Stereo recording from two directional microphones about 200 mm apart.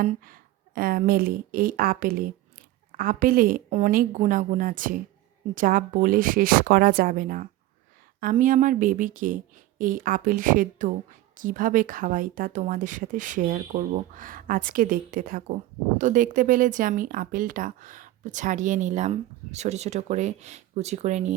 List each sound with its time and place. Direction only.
0.0 s speech: 40° right (ahead or behind)